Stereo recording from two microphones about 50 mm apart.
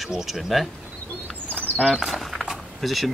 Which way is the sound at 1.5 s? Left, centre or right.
Left.